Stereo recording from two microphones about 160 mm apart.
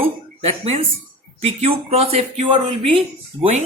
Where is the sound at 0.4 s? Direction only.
35° right (ahead or behind).